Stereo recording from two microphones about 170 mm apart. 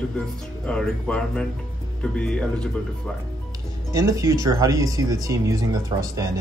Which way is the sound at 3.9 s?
20° right (ahead or behind).